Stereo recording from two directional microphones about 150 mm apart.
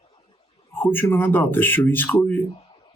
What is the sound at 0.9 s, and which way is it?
Speech, 15° left (ahead or behind).